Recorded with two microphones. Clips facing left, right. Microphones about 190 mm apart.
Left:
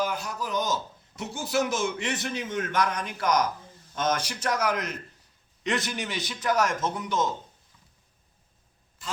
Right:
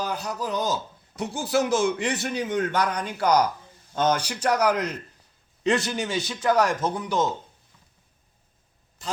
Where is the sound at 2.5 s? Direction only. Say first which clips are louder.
Right 2 dB; 35° right (ahead or behind).